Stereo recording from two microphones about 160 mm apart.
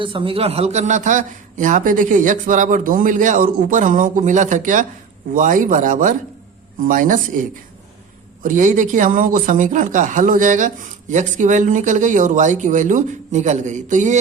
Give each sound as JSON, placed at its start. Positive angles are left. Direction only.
{"t": 0.0, "sound": "speech", "side_deg": -30}
{"t": 8.4, "sound": "speech", "side_deg": -55}